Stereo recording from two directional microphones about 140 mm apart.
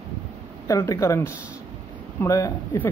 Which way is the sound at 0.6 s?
20° left (ahead or behind).